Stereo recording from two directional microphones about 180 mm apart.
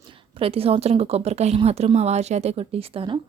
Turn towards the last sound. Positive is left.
turn(degrees=-30)  # may be behind; listen again after turning